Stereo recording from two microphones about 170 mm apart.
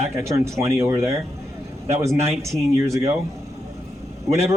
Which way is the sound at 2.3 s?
15° right (ahead or behind).